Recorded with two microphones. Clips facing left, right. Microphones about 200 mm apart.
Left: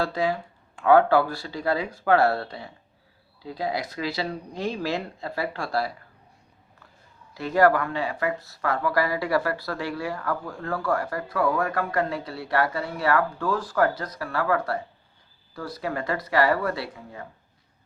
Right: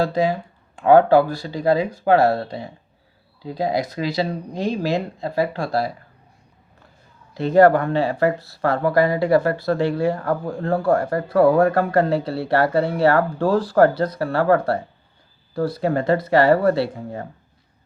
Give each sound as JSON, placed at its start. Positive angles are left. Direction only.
{"t": 0.9, "sound": "speech", "side_deg": -20}
{"t": 7.3, "sound": "speech", "side_deg": -25}
{"t": 16.9, "sound": "speech", "side_deg": -40}